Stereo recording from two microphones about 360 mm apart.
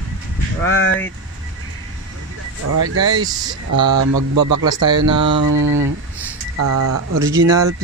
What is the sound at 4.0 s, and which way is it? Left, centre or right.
Speech, right.